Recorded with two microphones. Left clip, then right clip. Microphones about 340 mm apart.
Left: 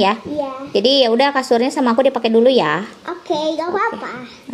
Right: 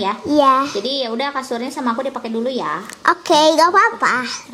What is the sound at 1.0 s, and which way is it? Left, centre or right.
A woman's voice, left.